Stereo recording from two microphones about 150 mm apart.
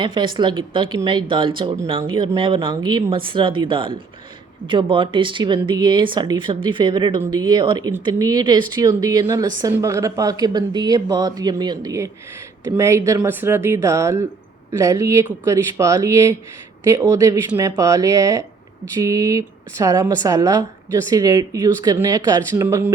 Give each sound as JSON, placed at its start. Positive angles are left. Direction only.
{"t": 0.0, "sound": "a woman's voice", "side_deg": -35}
{"t": 22.6, "sound": "speech", "side_deg": -15}